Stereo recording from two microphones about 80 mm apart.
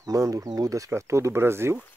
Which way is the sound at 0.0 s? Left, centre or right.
Right.